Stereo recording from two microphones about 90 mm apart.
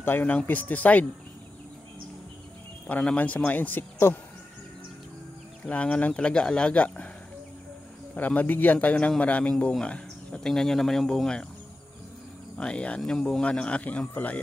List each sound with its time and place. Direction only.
0.0 s a man's voice: 20° left (ahead or behind)
2.9 s speech: 15° left (ahead or behind)
5.7 s a man's voice: 15° left (ahead or behind)
8.1 s a man's voice: 20° left (ahead or behind)
12.5 s a man's voice: 10° left (ahead or behind)